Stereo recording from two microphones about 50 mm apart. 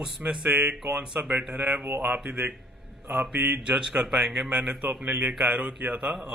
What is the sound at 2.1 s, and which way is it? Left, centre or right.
Speech, right.